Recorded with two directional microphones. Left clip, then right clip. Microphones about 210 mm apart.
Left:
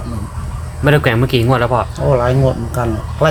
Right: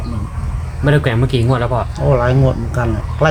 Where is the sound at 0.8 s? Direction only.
40° left (ahead or behind).